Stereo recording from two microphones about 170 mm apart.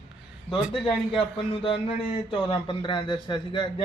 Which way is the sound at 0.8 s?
30° left (ahead or behind).